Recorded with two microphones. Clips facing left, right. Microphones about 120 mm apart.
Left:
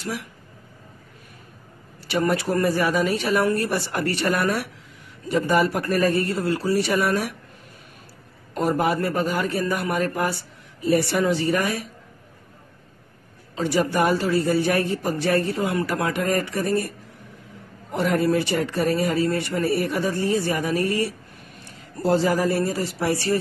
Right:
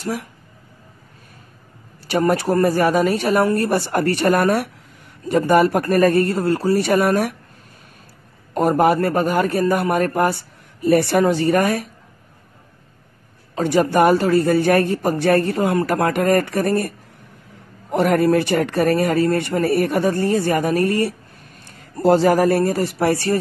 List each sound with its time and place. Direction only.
0.0 s a man's voice: 45° right (ahead or behind)
2.0 s a man's voice: 45° right (ahead or behind)
8.5 s a man's voice: 55° right (ahead or behind)
13.6 s a man's voice: 55° right (ahead or behind)
17.9 s a man's voice: 60° right (ahead or behind)